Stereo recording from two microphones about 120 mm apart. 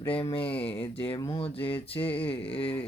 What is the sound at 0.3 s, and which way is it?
Speech, 50° left (ahead or behind).